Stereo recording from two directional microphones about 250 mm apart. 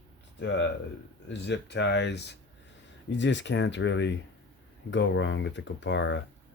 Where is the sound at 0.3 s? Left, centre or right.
Left.